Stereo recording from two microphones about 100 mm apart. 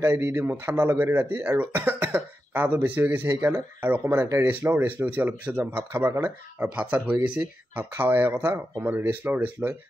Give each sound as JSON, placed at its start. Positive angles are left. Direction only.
{"t": 0.0, "sound": "speech", "side_deg": -25}